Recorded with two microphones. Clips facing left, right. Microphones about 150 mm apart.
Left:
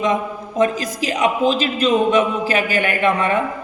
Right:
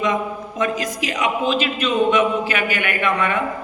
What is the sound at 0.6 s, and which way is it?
Speech, 35° left (ahead or behind).